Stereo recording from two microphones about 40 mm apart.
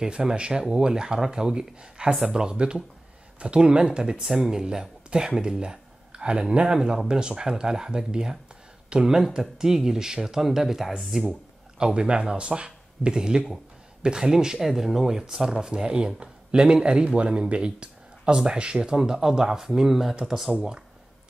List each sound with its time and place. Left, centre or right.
0.0 s speech: centre
11.8 s speech: right; by 20.5 s centre